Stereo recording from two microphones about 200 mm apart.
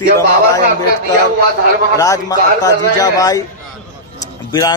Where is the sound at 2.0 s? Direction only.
15° left (ahead or behind).